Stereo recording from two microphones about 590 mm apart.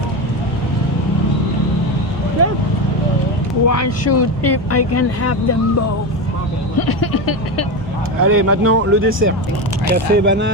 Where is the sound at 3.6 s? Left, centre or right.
Left.